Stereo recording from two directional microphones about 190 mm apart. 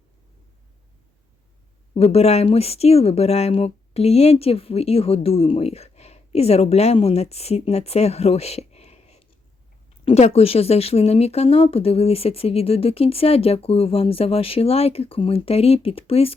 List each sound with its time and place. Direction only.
2.0 s speech: 30° left (ahead or behind)